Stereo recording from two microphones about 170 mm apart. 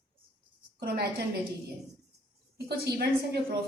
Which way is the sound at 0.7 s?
65° right (ahead or behind).